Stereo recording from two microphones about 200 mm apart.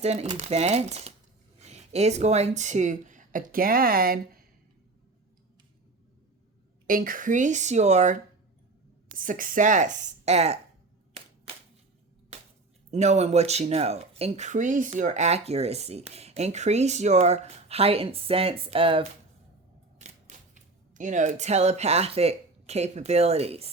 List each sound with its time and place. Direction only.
0.0 s speech: 30° right (ahead or behind)
6.8 s speech: 45° right (ahead or behind)
12.9 s speech: 35° right (ahead or behind)
20.0 s speech: 40° right (ahead or behind)